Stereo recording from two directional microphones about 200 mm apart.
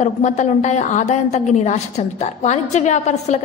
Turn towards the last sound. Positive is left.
turn(degrees=35)  # may be behind; listen again after turning